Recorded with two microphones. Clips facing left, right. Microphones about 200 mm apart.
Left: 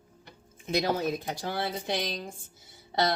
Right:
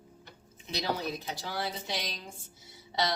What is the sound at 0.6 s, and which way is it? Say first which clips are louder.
A woman's voice: left 6 dB; 50° left (ahead or behind).